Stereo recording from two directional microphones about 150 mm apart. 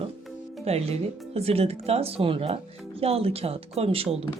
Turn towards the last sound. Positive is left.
turn(degrees=-40)  # may be behind; listen again after turning